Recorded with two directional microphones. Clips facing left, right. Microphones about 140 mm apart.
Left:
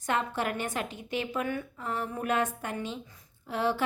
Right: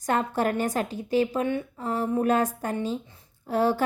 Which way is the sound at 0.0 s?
40° right (ahead or behind).